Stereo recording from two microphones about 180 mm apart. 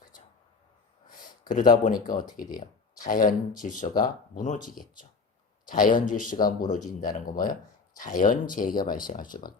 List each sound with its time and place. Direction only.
1.5 s speech: 50° left (ahead or behind)